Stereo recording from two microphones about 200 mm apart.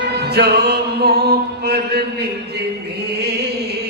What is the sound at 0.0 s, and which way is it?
Music, 55° right (ahead or behind).